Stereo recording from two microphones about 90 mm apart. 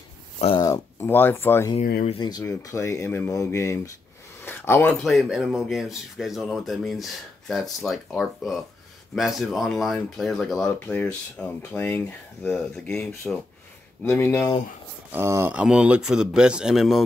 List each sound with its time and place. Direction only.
1.0 s speech: 25° left (ahead or behind)
1.7 s speech: 55° left (ahead or behind)
2.4 s speech: 35° left (ahead or behind)
3.3 s speech: 35° left (ahead or behind)
4.5 s a sound: 25° left (ahead or behind)
5.0 s speech: centre (ahead or behind)
10.9 s speech: 15° left (ahead or behind)
12.4 s speech: 5° left (ahead or behind)
14.0 s speech: 25° left (ahead or behind)
15.1 s speech: 30° right (ahead or behind)
15.5 s speech: 10° right (ahead or behind)